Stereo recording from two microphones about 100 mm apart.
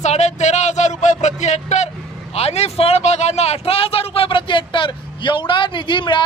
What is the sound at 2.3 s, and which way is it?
A man's voice, 90° left.